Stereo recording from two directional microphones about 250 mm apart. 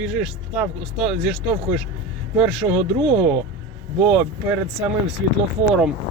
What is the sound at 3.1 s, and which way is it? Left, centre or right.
Speech, right.